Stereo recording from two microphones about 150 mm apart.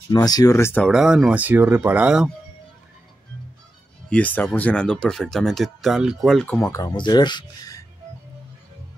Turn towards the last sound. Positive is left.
turn(degrees=25)  # may be behind; listen again after turning